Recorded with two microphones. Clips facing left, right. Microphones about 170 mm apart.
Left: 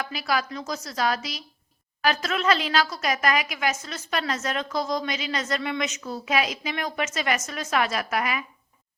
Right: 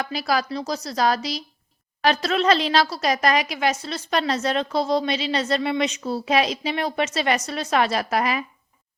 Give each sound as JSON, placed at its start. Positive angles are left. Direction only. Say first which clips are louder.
{"t": 0.0, "sound": "a woman's voice", "louder": "right 3 dB", "side_deg": -35}